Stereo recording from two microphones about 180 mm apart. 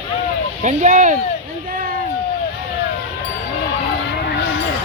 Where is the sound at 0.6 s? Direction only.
45° right (ahead or behind).